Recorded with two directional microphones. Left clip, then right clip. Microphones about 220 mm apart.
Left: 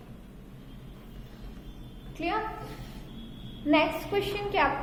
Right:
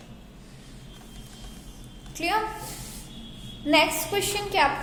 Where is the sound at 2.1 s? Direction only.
15° right (ahead or behind).